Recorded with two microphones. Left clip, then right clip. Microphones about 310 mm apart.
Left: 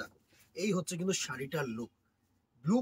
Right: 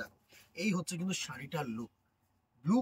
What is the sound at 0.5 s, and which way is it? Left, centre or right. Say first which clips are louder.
Speech: left 2 dB; centre.